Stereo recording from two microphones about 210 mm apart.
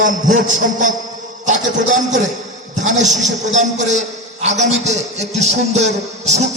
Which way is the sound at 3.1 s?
35° right (ahead or behind).